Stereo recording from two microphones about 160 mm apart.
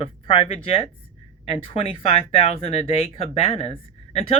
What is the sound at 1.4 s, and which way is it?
Speech, 35° left (ahead or behind).